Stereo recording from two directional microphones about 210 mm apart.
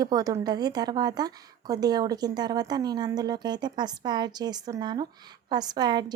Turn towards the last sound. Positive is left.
turn(degrees=-20)  # may be behind; listen again after turning